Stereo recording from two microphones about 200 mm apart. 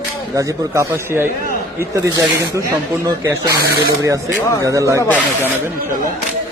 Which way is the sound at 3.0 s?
15° right (ahead or behind).